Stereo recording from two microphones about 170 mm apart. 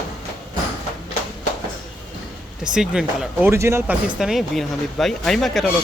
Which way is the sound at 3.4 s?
15° right (ahead or behind).